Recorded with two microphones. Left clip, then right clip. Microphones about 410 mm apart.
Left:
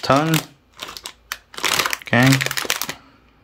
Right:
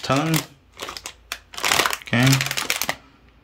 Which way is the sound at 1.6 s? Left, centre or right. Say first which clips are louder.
Even; centre.